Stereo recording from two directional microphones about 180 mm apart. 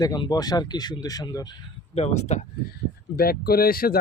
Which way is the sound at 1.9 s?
35° left (ahead or behind).